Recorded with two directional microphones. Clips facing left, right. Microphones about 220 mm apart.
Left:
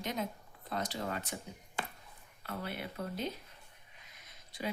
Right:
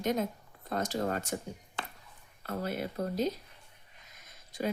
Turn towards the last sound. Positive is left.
turn(degrees=-45)  # may be behind; listen again after turning